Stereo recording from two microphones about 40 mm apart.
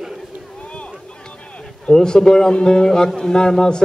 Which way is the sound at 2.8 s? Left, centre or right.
Centre.